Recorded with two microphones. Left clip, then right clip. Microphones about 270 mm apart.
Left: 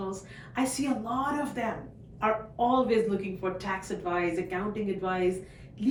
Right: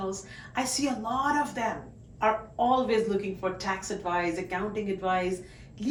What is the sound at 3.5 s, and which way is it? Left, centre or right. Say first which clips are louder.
Speech: right 1 dB; centre.